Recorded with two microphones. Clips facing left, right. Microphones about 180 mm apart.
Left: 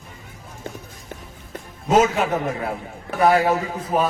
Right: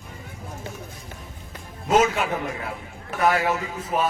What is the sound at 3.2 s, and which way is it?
Speech, 35° left (ahead or behind).